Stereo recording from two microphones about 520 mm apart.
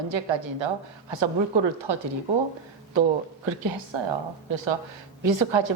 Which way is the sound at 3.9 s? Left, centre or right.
Right.